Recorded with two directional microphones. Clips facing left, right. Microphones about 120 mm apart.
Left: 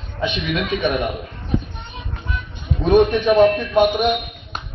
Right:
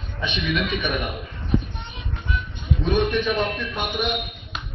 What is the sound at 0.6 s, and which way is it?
Speech, 35° left (ahead or behind).